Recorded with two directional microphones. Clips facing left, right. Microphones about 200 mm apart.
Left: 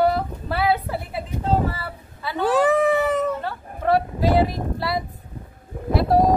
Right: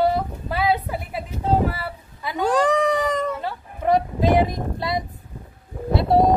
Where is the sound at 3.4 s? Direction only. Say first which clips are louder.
Right 1 dB; 15° right (ahead or behind).